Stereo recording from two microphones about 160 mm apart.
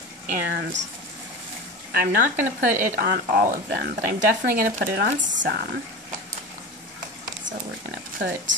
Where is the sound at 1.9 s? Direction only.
70° right (ahead or behind).